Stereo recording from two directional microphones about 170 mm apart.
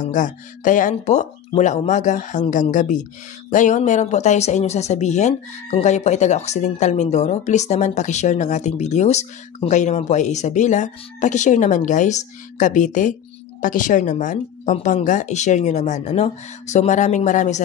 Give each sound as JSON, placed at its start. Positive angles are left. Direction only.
{"t": 0.0, "sound": "speech", "side_deg": 50}